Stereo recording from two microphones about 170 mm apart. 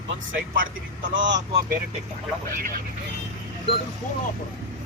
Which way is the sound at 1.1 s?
90° right.